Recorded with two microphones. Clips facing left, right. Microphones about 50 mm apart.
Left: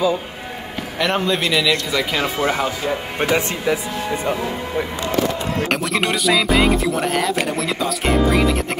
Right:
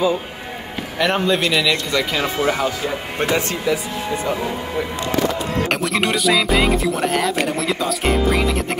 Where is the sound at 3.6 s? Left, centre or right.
Left.